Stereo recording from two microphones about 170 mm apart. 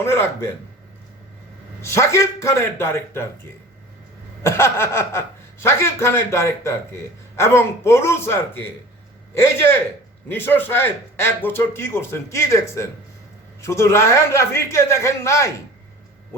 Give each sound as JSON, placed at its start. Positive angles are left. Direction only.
{"t": 0.0, "sound": "speech", "side_deg": 15}
{"t": 1.8, "sound": "speech", "side_deg": 15}
{"t": 4.4, "sound": "speech", "side_deg": 15}